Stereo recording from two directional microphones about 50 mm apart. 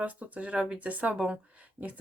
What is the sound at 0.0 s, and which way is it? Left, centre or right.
Speech, right.